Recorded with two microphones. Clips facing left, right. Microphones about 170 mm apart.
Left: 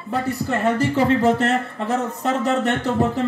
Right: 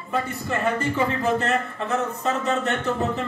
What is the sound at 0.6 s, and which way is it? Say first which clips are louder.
Speech: left 4 dB; 90° left.